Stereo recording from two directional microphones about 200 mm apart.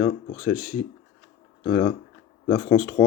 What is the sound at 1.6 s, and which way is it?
Speech, 25° left (ahead or behind).